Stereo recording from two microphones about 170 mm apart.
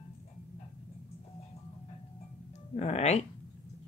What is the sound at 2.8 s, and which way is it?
Music, 40° left (ahead or behind).